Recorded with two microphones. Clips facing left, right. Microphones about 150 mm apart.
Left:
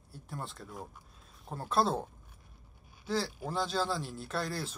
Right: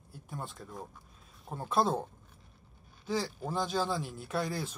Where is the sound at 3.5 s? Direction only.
15° right (ahead or behind).